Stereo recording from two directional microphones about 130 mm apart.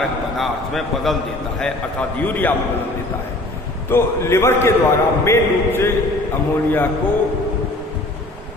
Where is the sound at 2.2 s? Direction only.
15° left (ahead or behind).